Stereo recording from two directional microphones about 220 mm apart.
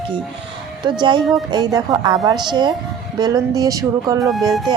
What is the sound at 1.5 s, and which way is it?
Speech, 20° right (ahead or behind).